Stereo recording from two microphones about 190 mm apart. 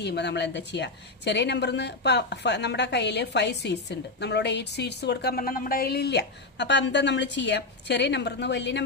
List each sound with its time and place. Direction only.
0.0 s a woman's voice: 65° left (ahead or behind)